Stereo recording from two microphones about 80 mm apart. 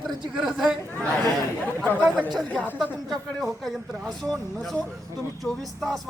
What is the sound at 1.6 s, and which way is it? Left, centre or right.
A woman's voice, left.